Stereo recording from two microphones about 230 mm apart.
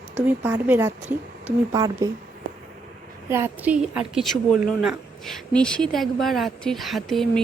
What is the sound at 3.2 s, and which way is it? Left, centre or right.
A woman's voice, centre.